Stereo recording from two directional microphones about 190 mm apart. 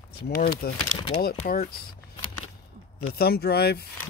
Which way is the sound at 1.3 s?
50° left (ahead or behind).